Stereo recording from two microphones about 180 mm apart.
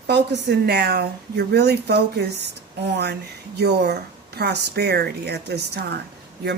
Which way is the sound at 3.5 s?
65° right (ahead or behind).